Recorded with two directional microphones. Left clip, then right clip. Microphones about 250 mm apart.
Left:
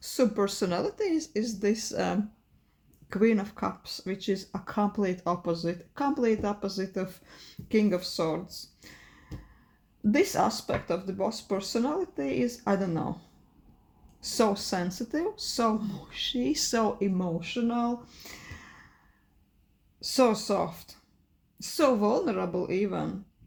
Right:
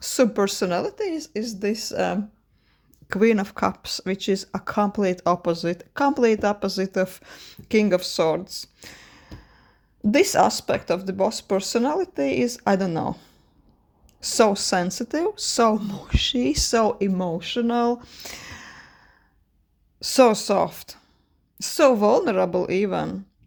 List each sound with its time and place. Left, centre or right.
0.0 s speech: right
20.0 s speech: right